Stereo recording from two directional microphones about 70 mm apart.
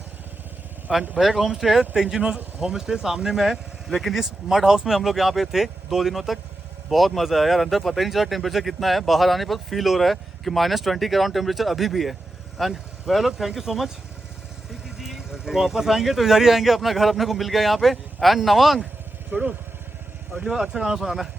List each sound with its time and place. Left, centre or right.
1.2 s speech: centre
19.3 s speech: centre
20.3 s speech: centre